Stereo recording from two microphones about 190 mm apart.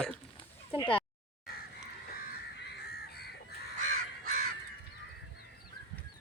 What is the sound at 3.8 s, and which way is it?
Crow, 40° right (ahead or behind).